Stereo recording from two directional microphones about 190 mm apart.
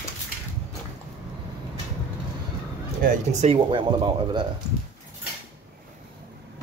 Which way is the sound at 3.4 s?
30° right (ahead or behind).